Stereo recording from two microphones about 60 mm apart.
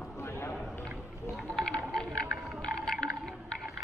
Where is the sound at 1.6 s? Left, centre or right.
Centre.